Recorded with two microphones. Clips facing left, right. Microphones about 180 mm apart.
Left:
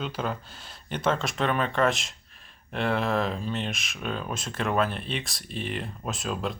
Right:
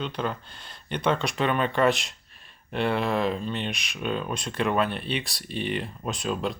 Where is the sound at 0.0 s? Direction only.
5° left (ahead or behind).